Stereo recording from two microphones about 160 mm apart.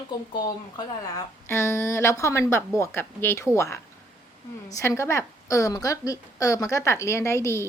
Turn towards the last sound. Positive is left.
turn(degrees=15)  # may be behind; listen again after turning